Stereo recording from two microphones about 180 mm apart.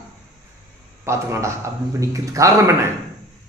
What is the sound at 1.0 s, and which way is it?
A man's voice, 15° right (ahead or behind).